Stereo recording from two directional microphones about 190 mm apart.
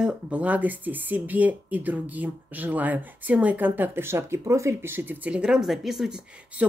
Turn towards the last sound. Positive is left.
turn(degrees=-5)  # may be behind; listen again after turning